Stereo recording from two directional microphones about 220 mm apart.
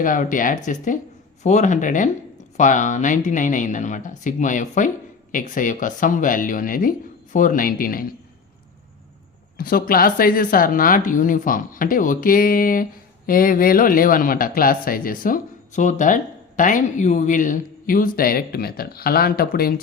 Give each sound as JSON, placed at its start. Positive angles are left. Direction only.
{"t": 0.0, "sound": "a woman's voice", "side_deg": 35}
{"t": 9.6, "sound": "a woman's voice", "side_deg": 40}